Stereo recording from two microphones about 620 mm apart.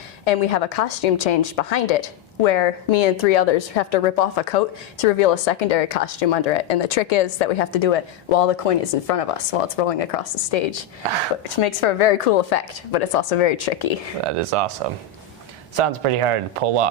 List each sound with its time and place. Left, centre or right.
0.3 s a woman's voice: left
11.6 s a woman's voice: left
12.3 s a woman's voice: left
14.3 s speech: right
15.7 s speech: right